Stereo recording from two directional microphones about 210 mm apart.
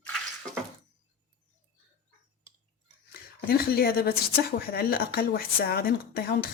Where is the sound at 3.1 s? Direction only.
45° left (ahead or behind).